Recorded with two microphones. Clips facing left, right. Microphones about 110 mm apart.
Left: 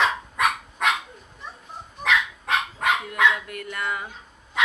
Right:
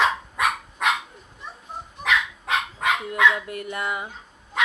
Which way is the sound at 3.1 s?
25° right (ahead or behind).